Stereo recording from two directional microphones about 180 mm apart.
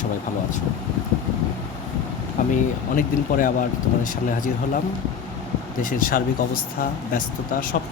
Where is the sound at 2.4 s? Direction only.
45° left (ahead or behind).